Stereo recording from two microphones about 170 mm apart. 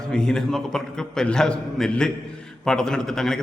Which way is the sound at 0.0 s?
5° left (ahead or behind).